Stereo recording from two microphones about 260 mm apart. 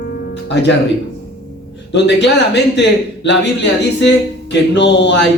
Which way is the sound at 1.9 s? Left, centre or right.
Left.